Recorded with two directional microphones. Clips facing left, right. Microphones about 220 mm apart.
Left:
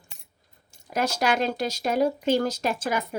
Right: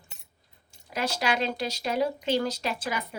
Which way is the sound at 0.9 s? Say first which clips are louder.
Left 4 dB; 45° left (ahead or behind).